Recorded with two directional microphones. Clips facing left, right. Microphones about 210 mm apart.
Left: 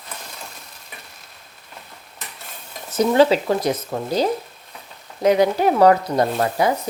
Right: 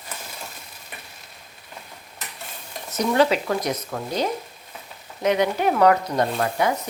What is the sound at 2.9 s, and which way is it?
Speech, 30° left (ahead or behind).